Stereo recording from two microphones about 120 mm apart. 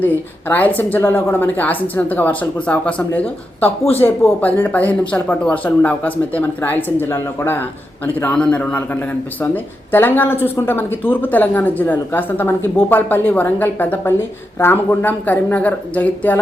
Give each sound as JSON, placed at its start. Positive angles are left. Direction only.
{"t": 0.0, "sound": "speech", "side_deg": 15}